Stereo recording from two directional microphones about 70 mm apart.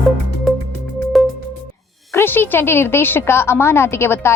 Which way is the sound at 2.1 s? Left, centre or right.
Left.